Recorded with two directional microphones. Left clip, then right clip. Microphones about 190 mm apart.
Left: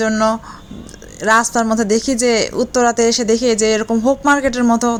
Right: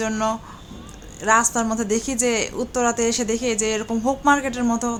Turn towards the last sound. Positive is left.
turn(degrees=30)  # may be behind; listen again after turning